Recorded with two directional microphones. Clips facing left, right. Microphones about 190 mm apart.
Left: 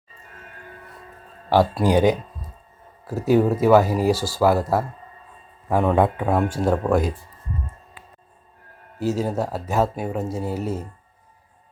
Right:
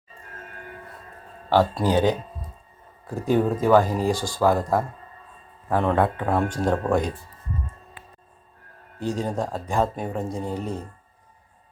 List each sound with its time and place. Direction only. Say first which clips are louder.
1.5 s speech: left 2 dB; 10° left (ahead or behind)
9.0 s speech: left 3 dB; 5° left (ahead or behind)